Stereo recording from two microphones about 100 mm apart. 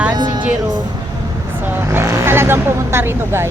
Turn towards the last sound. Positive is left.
turn(degrees=-25)  # may be behind; listen again after turning